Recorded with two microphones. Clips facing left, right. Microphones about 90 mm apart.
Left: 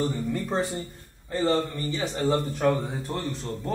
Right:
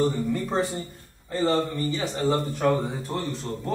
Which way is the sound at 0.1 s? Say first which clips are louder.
Right 2 dB; 5° right (ahead or behind).